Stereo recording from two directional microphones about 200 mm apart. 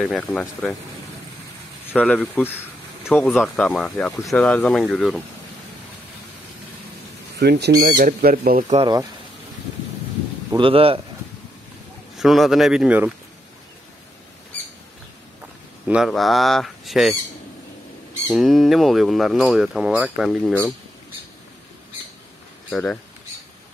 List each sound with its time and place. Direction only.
0.0 s speech: centre (ahead or behind)
1.9 s speech: 5° left (ahead or behind)
7.3 s speech: 55° right (ahead or behind)
8.7 s speech: 20° right (ahead or behind)
10.6 s speech: 30° right (ahead or behind)
12.2 s speech: centre (ahead or behind)
15.9 s speech: centre (ahead or behind)
18.3 s speech: centre (ahead or behind)
22.7 s speech: 5° left (ahead or behind)